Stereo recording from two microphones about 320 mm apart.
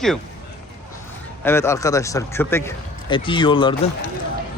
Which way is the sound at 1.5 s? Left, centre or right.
Centre.